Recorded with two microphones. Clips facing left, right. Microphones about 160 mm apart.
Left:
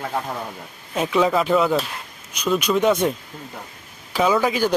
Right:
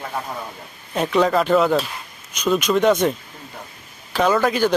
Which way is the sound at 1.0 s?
5° left (ahead or behind).